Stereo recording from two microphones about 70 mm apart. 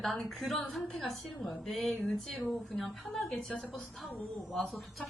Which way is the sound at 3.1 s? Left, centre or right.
Centre.